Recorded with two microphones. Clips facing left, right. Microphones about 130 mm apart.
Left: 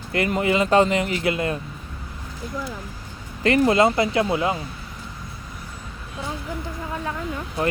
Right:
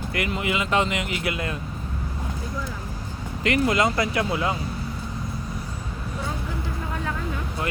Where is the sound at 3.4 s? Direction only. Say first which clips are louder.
Left 4 dB; 35° left (ahead or behind).